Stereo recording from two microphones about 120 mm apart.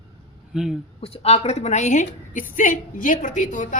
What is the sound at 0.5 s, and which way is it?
Speech, 5° right (ahead or behind).